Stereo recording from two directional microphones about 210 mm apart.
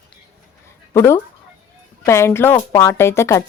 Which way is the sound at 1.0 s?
10° left (ahead or behind).